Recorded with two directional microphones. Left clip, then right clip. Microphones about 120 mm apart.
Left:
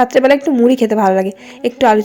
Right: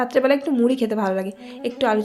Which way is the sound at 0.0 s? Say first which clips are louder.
Left 8 dB; 45° left (ahead or behind).